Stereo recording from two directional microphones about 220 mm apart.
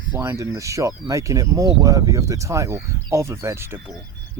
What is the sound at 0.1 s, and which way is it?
Speech, 15° right (ahead or behind).